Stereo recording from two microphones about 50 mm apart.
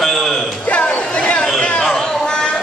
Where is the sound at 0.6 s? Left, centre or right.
Left.